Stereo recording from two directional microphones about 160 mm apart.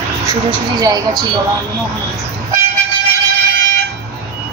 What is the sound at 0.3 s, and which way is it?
Speech, 25° right (ahead or behind).